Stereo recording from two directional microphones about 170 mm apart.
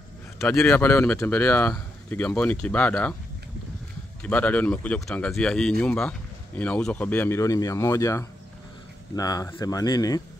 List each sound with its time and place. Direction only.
0.4 s speech: 5° left (ahead or behind)
4.2 s speech: 10° left (ahead or behind)